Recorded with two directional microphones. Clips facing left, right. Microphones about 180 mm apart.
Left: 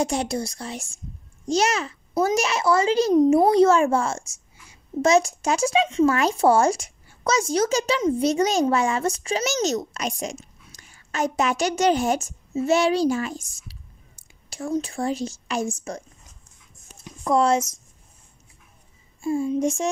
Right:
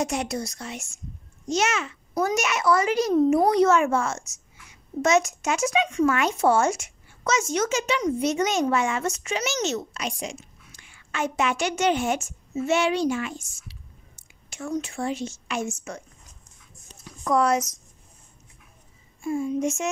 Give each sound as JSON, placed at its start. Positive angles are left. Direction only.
{"t": 0.0, "sound": "a woman's voice", "side_deg": 30}
{"t": 17.0, "sound": "speech", "side_deg": 25}
{"t": 19.2, "sound": "a woman's voice", "side_deg": 30}